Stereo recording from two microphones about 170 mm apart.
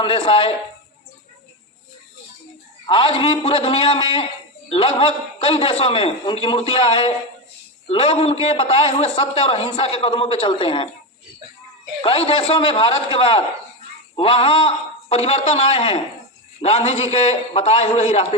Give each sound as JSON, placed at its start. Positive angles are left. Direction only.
{"t": 0.0, "sound": "a man's voice", "side_deg": 30}
{"t": 2.8, "sound": "a man's voice", "side_deg": 30}
{"t": 12.0, "sound": "a man's voice", "side_deg": 30}